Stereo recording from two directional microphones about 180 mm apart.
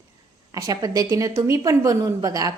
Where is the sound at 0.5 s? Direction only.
20° right (ahead or behind).